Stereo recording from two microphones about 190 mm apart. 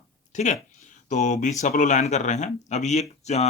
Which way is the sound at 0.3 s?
40° left (ahead or behind).